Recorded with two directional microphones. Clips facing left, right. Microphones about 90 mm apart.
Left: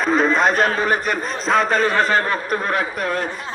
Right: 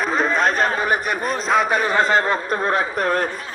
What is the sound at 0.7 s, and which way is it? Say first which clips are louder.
A man's voice: left 1 dB; 15° right (ahead or behind).